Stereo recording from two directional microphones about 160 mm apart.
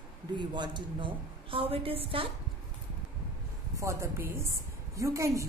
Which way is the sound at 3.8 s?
15° right (ahead or behind).